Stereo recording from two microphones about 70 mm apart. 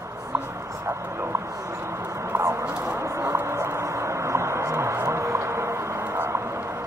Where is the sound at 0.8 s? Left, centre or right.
Right.